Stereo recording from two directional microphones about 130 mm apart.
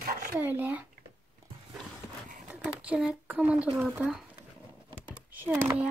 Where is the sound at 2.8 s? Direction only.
10° right (ahead or behind).